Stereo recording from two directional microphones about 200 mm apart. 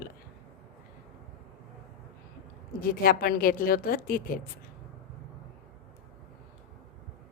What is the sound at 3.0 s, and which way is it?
Speech, 45° left (ahead or behind).